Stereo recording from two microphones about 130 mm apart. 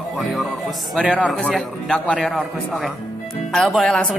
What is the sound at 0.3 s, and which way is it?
A man's voice, centre (ahead or behind).